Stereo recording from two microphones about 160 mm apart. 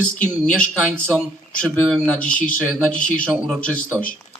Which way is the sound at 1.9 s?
10° left (ahead or behind).